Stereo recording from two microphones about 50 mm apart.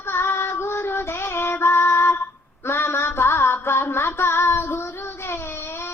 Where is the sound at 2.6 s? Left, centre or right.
Left.